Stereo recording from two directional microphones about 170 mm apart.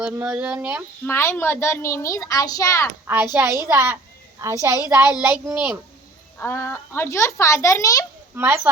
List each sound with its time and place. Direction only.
0.0 s a child's voice: 10° right (ahead or behind)
1.0 s a child's voice: 15° left (ahead or behind)
3.3 s a child's voice: 15° right (ahead or behind)
6.4 s a child's voice: 15° left (ahead or behind)
8.4 s a child's voice: 15° right (ahead or behind)